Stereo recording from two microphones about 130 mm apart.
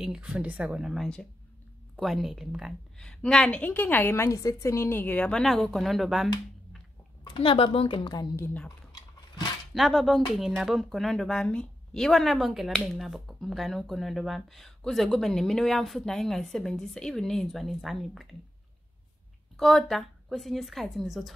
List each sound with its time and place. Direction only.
0.0 s a woman's voice: 5° right (ahead or behind)
7.2 s a woman's voice: 45° left (ahead or behind)
8.6 s cutlery: 30° left (ahead or behind)
9.8 s speech: centre (ahead or behind)
19.5 s speech: 5° left (ahead or behind)